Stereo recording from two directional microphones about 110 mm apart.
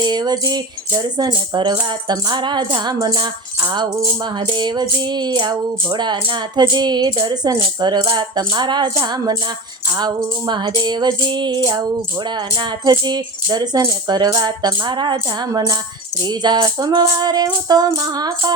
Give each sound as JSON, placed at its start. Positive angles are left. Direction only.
{"t": 0.0, "sound": "speech", "side_deg": -40}
{"t": 1.9, "sound": "music", "side_deg": -40}
{"t": 6.1, "sound": "speech", "side_deg": -50}
{"t": 10.4, "sound": "music", "side_deg": -40}
{"t": 11.6, "sound": "speech", "side_deg": -35}